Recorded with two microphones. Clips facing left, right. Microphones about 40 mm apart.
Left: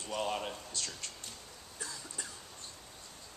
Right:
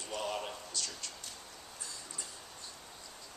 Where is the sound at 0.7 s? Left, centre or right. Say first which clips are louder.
Even; left.